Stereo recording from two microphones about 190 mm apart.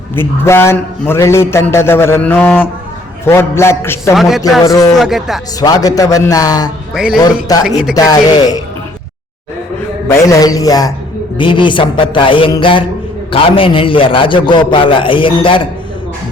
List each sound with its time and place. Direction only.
0.2 s a man's voice: 15° left (ahead or behind)
4.1 s a man's voice: centre (ahead or behind)
4.6 s a man's voice: 20° left (ahead or behind)
4.9 s a man's voice: centre (ahead or behind)
5.5 s a man's voice: 20° left (ahead or behind)
6.9 s a man's voice: 5° right (ahead or behind)
7.5 s a man's voice: 20° left (ahead or behind)
10.1 s a man's voice: 20° left (ahead or behind)